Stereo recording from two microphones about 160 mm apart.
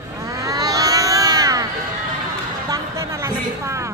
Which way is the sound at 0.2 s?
20° right (ahead or behind).